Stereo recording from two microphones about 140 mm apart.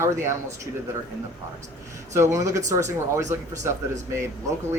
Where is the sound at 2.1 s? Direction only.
20° right (ahead or behind).